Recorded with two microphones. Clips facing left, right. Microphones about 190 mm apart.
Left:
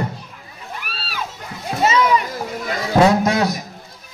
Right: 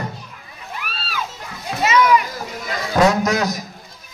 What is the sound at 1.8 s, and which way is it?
Children playing, 30° left (ahead or behind).